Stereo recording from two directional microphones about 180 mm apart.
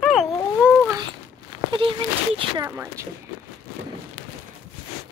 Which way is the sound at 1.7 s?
30° right (ahead or behind).